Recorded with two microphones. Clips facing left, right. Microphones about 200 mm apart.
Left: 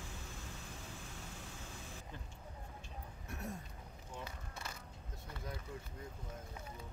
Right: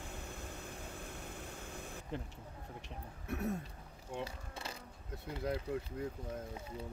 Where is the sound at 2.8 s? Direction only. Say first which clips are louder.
Right 3 dB; 60° right (ahead or behind).